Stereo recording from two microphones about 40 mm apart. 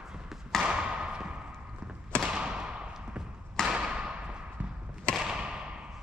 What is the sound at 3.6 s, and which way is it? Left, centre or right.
Thump, centre.